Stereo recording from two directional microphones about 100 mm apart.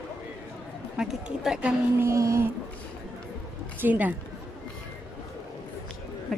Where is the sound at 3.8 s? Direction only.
15° right (ahead or behind).